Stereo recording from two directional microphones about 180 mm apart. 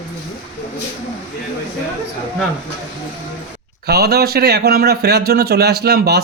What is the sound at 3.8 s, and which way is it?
A man's voice, 60° right (ahead or behind).